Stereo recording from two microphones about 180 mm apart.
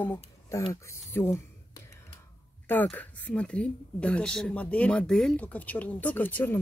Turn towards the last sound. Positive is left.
turn(degrees=10)  # may be behind; listen again after turning